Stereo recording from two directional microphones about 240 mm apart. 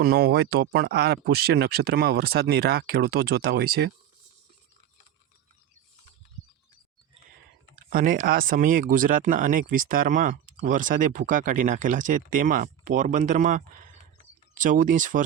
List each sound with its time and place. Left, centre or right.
0.0 s speech: right
7.9 s speech: right